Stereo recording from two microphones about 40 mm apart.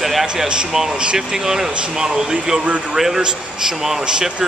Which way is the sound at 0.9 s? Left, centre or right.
Right.